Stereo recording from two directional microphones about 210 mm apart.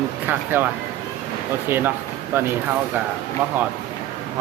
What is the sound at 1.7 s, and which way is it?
Speech, 10° right (ahead or behind).